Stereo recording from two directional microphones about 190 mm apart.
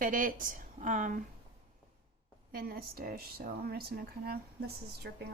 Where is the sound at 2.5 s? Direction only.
50° right (ahead or behind).